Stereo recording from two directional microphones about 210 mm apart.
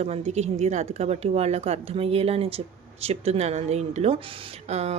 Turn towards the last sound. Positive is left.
turn(degrees=-30)  # may be behind; listen again after turning